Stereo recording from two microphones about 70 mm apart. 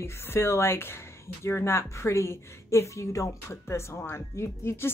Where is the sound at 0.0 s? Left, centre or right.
Left.